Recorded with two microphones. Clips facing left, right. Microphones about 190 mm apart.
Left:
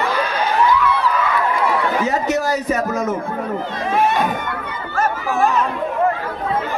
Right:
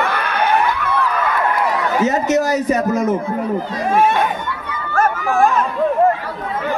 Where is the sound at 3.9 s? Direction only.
50° right (ahead or behind).